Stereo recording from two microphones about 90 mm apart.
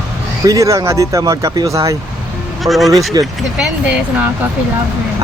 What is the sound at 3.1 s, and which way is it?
Speech, 50° right (ahead or behind).